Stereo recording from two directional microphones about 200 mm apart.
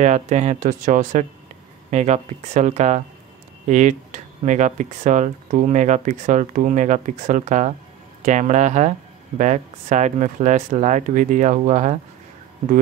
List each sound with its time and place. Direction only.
0.0 s speech: 35° right (ahead or behind)